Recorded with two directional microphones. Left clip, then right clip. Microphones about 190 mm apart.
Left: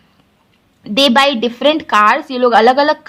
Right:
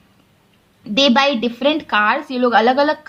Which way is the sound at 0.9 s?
30° left (ahead or behind).